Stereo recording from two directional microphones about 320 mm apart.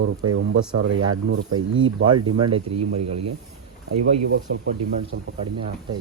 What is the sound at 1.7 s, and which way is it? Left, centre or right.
Speech, right.